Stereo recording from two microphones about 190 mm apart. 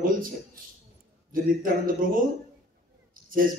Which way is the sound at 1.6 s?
45° right (ahead or behind).